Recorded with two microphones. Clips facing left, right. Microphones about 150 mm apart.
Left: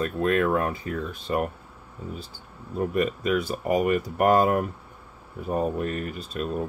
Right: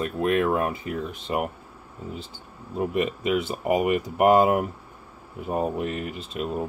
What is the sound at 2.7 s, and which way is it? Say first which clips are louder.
Speech: even; 20° right (ahead or behind).